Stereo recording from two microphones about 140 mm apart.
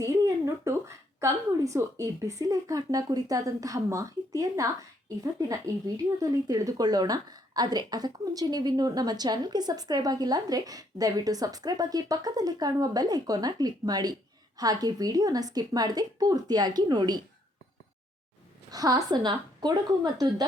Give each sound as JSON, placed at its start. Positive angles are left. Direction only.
{"t": 0.0, "sound": "speech", "side_deg": -20}
{"t": 18.7, "sound": "speech", "side_deg": -25}